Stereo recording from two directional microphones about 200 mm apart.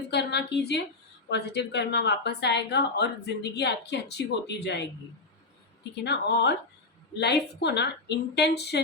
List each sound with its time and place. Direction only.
0.1 s a woman's voice: 55° left (ahead or behind)
6.0 s a woman's voice: 55° left (ahead or behind)